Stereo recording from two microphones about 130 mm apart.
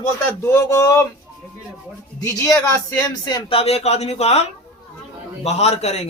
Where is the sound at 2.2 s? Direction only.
25° left (ahead or behind).